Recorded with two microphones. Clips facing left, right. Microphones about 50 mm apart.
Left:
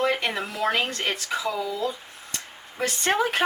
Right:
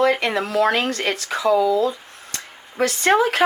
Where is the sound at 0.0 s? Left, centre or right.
Right.